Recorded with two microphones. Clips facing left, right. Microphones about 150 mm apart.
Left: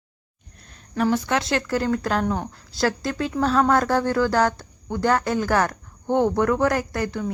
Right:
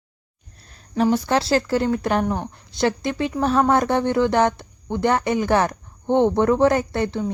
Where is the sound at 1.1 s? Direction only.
35° right (ahead or behind).